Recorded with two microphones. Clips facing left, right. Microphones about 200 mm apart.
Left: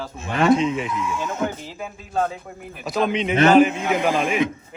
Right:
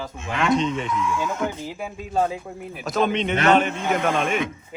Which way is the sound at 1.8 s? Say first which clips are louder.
Right 1 dB; 10° right (ahead or behind).